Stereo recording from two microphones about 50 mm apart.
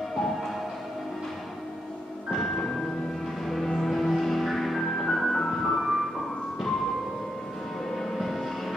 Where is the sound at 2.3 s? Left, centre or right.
Centre.